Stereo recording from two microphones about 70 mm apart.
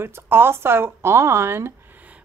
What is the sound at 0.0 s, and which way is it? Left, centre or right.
Speech, right.